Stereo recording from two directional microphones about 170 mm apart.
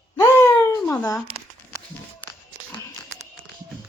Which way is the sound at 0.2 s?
15° left (ahead or behind).